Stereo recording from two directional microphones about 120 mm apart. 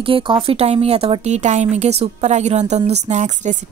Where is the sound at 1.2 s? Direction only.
75° right (ahead or behind).